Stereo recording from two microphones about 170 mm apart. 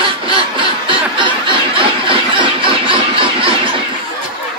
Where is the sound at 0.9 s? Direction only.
30° right (ahead or behind).